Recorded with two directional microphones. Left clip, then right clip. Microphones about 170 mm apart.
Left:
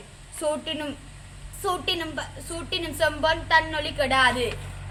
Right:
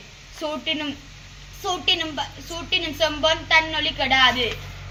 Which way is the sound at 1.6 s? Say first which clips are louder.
Right 4 dB; 20° left (ahead or behind).